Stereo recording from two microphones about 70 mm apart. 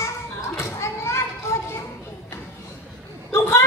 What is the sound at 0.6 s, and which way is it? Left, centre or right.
Children playing, left.